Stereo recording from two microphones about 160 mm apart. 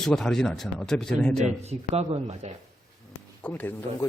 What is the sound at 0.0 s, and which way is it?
Speech, 5° left (ahead or behind).